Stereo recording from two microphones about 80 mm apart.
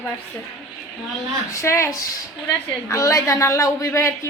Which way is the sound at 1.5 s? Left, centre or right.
Left.